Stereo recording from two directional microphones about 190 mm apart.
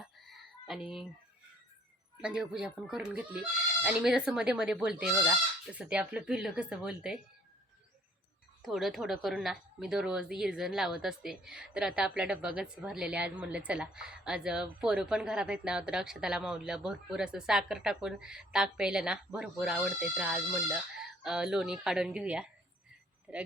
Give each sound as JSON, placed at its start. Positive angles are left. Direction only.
{"t": 0.0, "sound": "fowl", "side_deg": 0}
{"t": 2.2, "sound": "a woman's voice", "side_deg": -5}
{"t": 8.6, "sound": "a woman's voice", "side_deg": 0}